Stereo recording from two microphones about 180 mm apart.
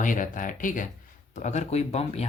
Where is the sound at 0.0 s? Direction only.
45° left (ahead or behind).